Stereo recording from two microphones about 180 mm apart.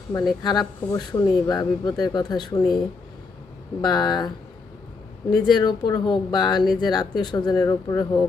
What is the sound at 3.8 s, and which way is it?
Speech, 25° left (ahead or behind).